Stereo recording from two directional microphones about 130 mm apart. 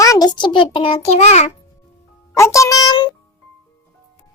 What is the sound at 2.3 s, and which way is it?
Speech, 25° left (ahead or behind).